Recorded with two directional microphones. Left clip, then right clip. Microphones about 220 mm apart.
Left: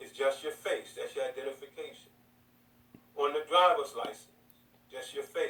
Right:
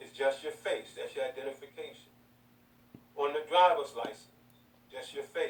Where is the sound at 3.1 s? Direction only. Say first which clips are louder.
Left 1 dB; 20° left (ahead or behind).